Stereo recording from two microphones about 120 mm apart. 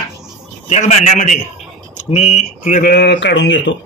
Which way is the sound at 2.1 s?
65° left (ahead or behind).